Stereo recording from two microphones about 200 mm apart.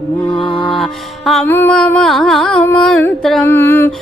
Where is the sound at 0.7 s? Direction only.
Centre (ahead or behind).